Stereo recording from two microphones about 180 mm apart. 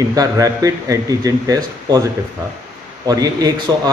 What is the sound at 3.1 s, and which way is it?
Speech, 20° right (ahead or behind).